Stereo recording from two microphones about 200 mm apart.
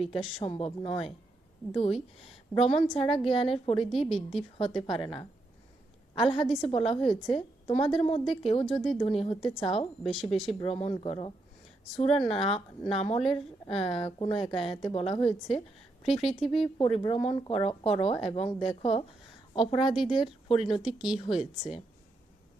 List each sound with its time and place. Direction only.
0.1 s a woman's voice: 30° left (ahead or behind)
4.1 s speech: centre (ahead or behind)
4.5 s a woman's voice: 30° left (ahead or behind)
16.2 s speech: centre (ahead or behind)
16.5 s speech: 25° left (ahead or behind)
20.7 s speech: 5° right (ahead or behind)